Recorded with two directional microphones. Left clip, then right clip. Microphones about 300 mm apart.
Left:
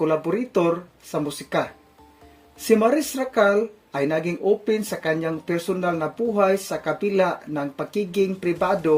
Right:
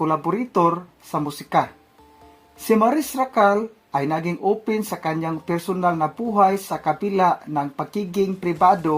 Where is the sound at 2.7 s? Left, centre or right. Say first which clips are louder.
Right 1 dB; right.